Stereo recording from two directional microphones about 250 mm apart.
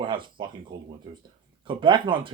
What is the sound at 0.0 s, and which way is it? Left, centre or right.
Speech, centre.